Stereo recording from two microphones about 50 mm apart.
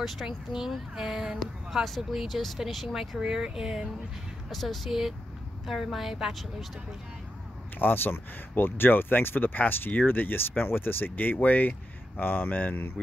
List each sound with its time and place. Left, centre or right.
0.0 s speech: centre
7.8 s speech: left